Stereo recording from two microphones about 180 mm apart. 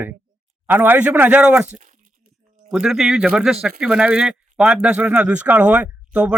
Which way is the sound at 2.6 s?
5° right (ahead or behind).